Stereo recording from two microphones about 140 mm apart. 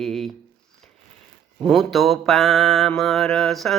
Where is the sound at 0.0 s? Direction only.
Centre (ahead or behind).